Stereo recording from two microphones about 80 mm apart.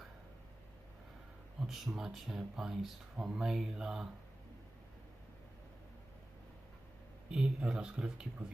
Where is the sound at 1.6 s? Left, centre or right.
Centre.